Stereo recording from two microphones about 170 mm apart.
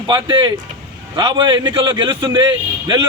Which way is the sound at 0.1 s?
25° right (ahead or behind).